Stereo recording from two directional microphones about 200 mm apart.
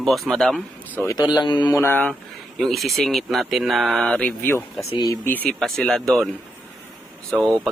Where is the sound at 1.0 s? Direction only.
20° left (ahead or behind).